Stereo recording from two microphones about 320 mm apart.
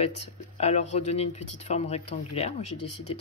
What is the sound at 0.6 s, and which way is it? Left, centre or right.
A woman's voice, centre.